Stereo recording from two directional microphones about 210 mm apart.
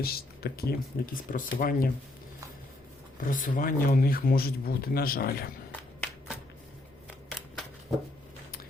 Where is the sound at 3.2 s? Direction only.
40° left (ahead or behind).